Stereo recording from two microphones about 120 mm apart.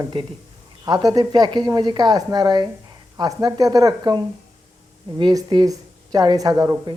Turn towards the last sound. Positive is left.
turn(degrees=-25)  # may be behind; listen again after turning